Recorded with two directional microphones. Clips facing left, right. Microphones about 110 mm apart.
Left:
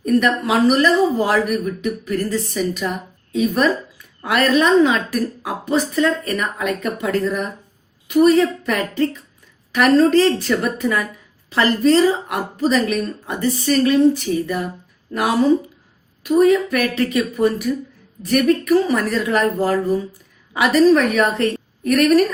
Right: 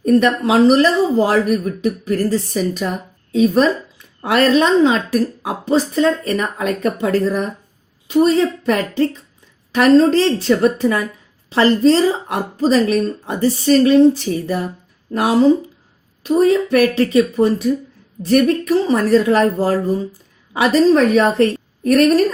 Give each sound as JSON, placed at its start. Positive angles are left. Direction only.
{"t": 0.0, "sound": "a woman's voice", "side_deg": -30}
{"t": 16.2, "sound": "a woman's voice", "side_deg": -30}